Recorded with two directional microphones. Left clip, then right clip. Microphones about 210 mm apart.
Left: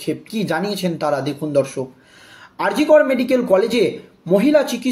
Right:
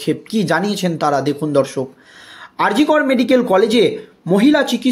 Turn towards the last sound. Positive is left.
turn(degrees=-35)  # may be behind; listen again after turning